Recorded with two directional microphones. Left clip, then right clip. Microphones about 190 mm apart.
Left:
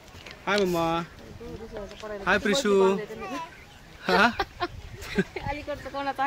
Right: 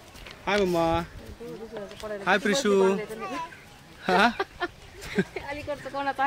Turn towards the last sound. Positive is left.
turn(degrees=5)  # may be behind; listen again after turning